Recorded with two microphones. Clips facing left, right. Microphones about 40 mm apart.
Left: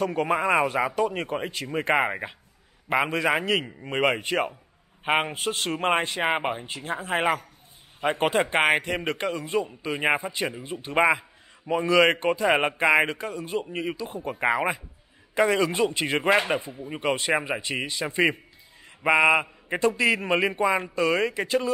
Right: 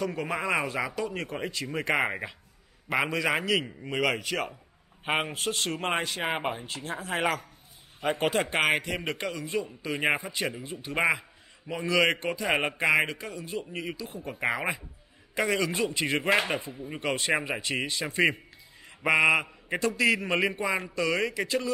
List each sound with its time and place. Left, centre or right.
0.0 s a man's voice: left
0.4 s a man's voice: left
6.8 s speech: left
9.0 s speech: left
9.8 s speech: centre
10.6 s a man's voice: left
13.7 s speech: left
14.0 s a man's voice: left
14.3 s speech: centre
15.3 s speech: left; by 18.1 s centre
18.9 s mantra: centre
20.2 s speech: left